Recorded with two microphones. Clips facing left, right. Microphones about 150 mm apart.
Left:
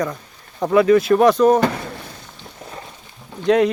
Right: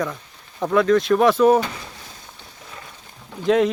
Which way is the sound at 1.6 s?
60° left (ahead or behind).